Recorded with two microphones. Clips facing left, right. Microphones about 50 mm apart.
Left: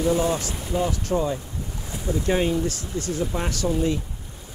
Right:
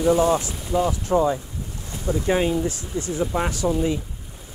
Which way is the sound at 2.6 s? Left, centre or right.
Right.